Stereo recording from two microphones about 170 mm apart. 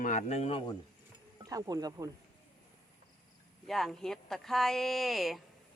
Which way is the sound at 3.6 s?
Centre (ahead or behind).